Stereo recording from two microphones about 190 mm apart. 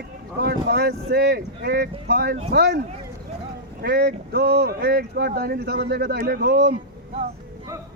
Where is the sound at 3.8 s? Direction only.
55° right (ahead or behind).